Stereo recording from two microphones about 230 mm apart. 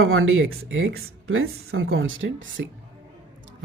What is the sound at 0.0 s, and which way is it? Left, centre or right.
Speech, right.